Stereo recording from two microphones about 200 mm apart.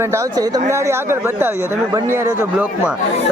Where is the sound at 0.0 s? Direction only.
15° right (ahead or behind).